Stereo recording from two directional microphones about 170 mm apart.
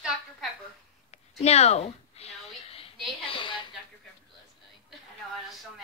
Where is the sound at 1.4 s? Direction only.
40° left (ahead or behind).